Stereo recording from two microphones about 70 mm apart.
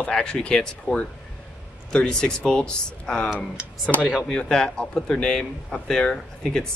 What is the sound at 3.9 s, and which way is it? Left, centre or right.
Speech, centre.